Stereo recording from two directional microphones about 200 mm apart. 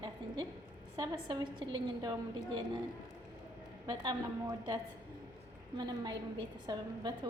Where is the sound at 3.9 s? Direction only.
20° right (ahead or behind).